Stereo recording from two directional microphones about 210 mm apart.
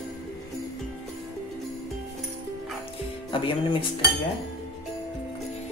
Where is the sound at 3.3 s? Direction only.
25° left (ahead or behind).